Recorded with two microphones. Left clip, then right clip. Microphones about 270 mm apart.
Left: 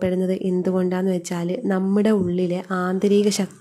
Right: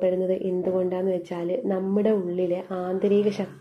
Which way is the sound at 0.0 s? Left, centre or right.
Left.